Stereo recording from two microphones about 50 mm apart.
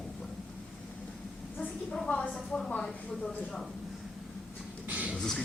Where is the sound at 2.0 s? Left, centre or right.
Left.